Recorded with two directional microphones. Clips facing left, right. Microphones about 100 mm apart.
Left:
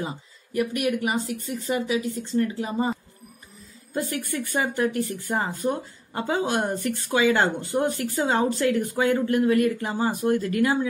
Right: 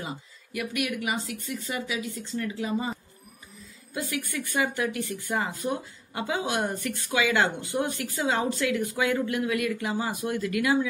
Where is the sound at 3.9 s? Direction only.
35° left (ahead or behind).